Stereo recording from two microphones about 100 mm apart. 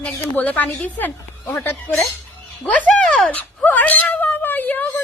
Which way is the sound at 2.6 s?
10° left (ahead or behind).